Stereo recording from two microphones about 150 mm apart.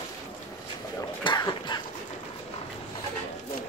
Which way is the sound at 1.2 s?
30° left (ahead or behind).